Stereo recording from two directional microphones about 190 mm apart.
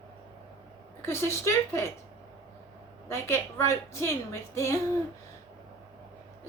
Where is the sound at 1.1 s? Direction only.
15° left (ahead or behind).